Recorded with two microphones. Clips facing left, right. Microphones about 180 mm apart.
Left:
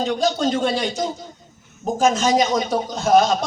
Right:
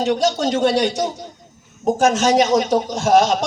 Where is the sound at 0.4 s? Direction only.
75° right (ahead or behind).